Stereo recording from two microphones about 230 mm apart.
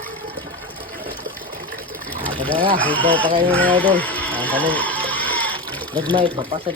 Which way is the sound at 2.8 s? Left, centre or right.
Centre.